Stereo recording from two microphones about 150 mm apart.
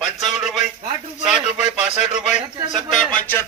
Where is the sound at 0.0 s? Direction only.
Centre (ahead or behind).